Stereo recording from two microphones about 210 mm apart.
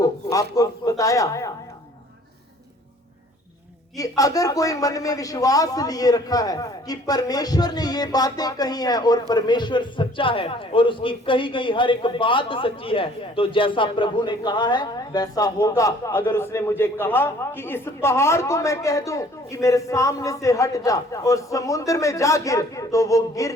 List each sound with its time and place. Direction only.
0.0 s speech: 15° left (ahead or behind)
3.9 s a man's voice: 15° left (ahead or behind)